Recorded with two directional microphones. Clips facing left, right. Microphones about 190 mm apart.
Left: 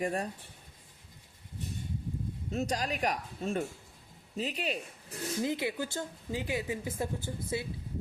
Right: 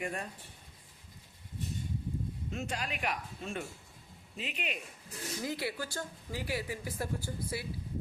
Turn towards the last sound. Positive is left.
turn(degrees=20)  # may be behind; listen again after turning